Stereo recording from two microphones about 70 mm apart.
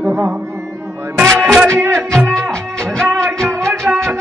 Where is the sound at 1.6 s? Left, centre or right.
Right.